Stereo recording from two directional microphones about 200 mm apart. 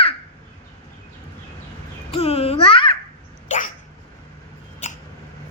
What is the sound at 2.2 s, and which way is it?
Babbling, 30° left (ahead or behind).